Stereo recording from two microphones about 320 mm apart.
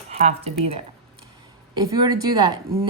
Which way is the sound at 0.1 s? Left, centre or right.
Centre.